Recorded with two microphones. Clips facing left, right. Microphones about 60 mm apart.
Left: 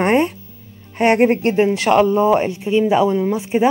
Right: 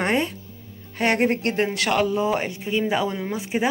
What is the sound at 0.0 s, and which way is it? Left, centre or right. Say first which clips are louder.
Music: left 7 dB; left.